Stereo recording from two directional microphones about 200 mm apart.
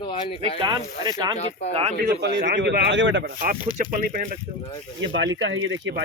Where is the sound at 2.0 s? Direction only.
55° right (ahead or behind).